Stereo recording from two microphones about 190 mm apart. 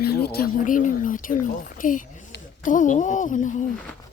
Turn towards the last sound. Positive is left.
turn(degrees=40)  # may be behind; listen again after turning